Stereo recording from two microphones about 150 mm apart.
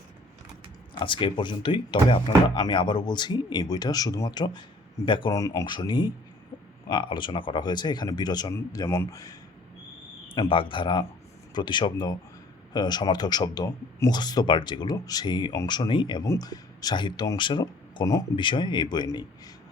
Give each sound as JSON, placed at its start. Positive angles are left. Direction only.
{"t": 0.9, "sound": "speech", "side_deg": 35}
{"t": 10.3, "sound": "speech", "side_deg": 35}